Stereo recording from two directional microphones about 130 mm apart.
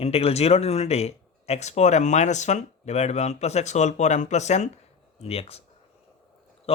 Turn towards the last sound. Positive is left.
turn(degrees=50)  # may be behind; listen again after turning